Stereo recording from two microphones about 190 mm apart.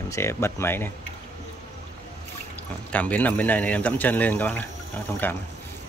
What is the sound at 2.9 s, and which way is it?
Speech, 10° left (ahead or behind).